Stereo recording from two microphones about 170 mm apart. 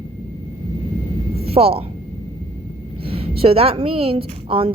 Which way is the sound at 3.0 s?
35° right (ahead or behind).